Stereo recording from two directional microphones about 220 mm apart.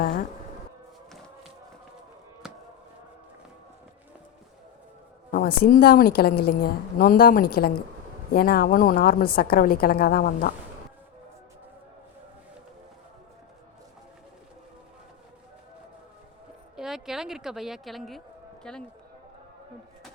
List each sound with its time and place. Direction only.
2.4 s chop: 5° right (ahead or behind)
5.3 s a woman's voice: 40° left (ahead or behind)
16.7 s a woman's voice: centre (ahead or behind)